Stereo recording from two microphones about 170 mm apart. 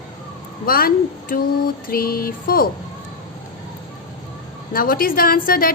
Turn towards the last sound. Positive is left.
turn(degrees=60)  # may be behind; listen again after turning